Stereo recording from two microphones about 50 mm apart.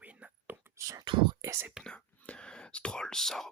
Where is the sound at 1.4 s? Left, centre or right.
Right.